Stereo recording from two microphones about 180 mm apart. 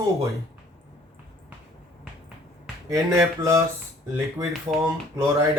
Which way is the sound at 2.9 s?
15° right (ahead or behind).